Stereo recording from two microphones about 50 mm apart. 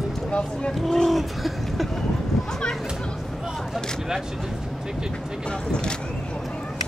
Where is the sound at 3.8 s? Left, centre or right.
Centre.